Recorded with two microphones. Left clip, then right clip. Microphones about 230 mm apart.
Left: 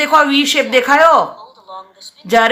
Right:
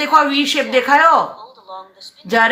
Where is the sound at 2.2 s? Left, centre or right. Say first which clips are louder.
Left 2 dB; left.